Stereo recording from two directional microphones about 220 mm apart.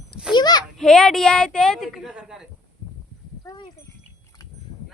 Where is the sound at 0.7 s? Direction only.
Centre (ahead or behind).